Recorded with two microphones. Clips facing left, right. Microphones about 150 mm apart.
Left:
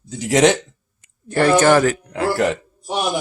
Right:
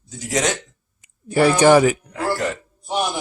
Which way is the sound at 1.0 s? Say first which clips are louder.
Right 1 dB; 10° right (ahead or behind).